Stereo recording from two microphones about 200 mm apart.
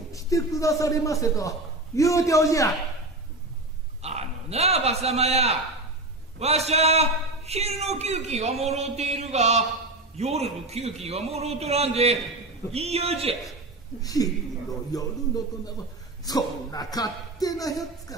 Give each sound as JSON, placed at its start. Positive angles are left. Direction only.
{"t": 0.1, "sound": "a man's voice", "side_deg": 15}
{"t": 4.0, "sound": "a man's voice", "side_deg": -30}
{"t": 14.0, "sound": "a man's voice", "side_deg": 20}